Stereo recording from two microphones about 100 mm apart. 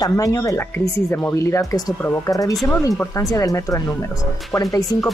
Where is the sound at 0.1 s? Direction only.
35° left (ahead or behind).